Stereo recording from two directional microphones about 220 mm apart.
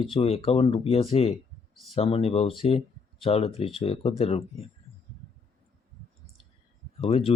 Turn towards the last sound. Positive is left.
turn(degrees=25)  # may be behind; listen again after turning